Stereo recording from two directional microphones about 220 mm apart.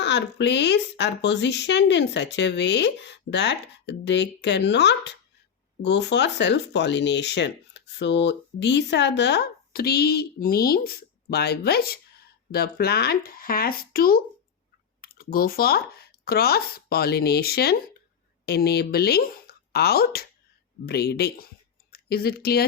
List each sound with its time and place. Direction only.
0.0 s speech: 50° left (ahead or behind)